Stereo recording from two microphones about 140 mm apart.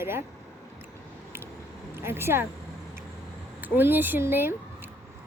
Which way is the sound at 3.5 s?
15° right (ahead or behind).